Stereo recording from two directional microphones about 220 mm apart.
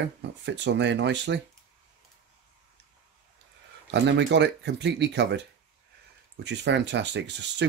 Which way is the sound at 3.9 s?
50° right (ahead or behind).